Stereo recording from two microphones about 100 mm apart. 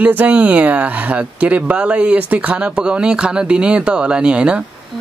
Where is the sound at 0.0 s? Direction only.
15° right (ahead or behind).